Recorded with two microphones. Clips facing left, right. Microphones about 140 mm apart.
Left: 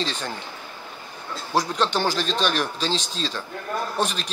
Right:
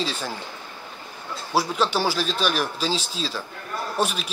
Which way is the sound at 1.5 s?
5° right (ahead or behind).